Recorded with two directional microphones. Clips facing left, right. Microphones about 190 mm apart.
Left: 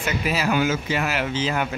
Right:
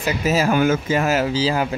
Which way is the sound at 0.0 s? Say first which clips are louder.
Right 5 dB; 45° right (ahead or behind).